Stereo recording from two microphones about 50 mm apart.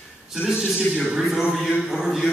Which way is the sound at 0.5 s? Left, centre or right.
Centre.